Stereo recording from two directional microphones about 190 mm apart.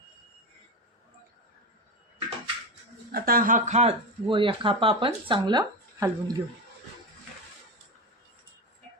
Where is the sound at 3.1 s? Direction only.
50° right (ahead or behind); by 6.4 s 20° right (ahead or behind).